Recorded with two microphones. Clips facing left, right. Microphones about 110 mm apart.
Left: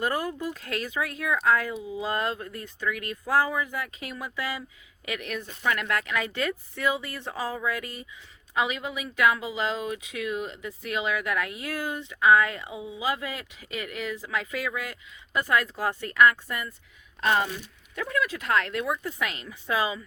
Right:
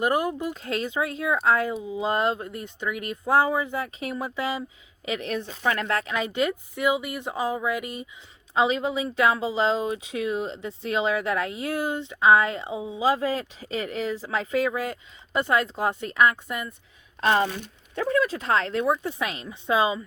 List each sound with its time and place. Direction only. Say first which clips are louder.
0.0 s speech: right 4 dB; 20° right (ahead or behind)